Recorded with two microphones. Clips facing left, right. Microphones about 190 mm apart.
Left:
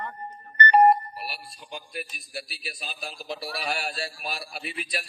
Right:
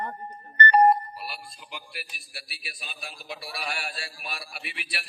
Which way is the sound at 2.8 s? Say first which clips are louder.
Left 4 dB; 35° left (ahead or behind).